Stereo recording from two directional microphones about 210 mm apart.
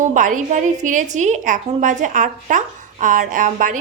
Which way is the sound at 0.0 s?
35° right (ahead or behind).